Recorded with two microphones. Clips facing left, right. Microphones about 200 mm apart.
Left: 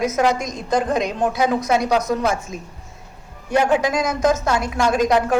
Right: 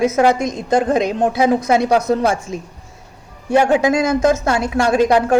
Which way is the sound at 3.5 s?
25° right (ahead or behind).